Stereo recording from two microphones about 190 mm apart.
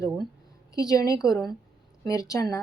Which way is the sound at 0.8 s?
20° left (ahead or behind).